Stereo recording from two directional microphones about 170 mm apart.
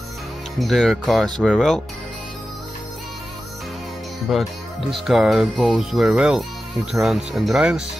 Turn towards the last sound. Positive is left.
turn(degrees=-5)  # may be behind; listen again after turning